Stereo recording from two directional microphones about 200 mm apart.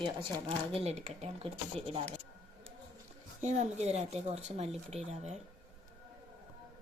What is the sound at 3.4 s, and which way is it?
Speech, 35° right (ahead or behind).